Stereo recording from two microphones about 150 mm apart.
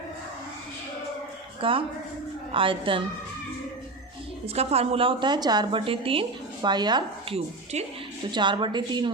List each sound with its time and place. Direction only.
1.6 s a woman's voice: 35° right (ahead or behind)
4.4 s a woman's voice: 45° right (ahead or behind)
7.3 s speech: 45° right (ahead or behind)
8.3 s a woman's voice: 30° right (ahead or behind)